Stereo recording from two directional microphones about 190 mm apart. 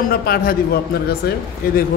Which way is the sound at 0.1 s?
55° left (ahead or behind).